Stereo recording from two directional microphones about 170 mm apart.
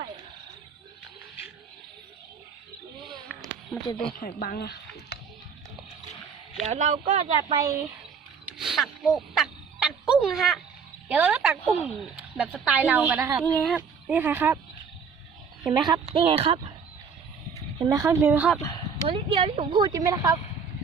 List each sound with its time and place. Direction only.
3.1 s a sound: centre (ahead or behind)
3.7 s speech: centre (ahead or behind)
4.2 s speech: 60° left (ahead or behind)
6.7 s speech: 45° right (ahead or behind)
7.5 s speech: 20° right (ahead or behind)
8.5 s a sound: centre (ahead or behind)
11.1 s a woman's voice: 10° right (ahead or behind)
13.4 s speech: 5° left (ahead or behind)
13.7 s speech: 10° right (ahead or behind)
15.7 s speech: 25° right (ahead or behind)
17.8 s a woman's voice: 20° right (ahead or behind)
18.6 s bow-wow: 20° left (ahead or behind)
19.0 s speech: 30° right (ahead or behind)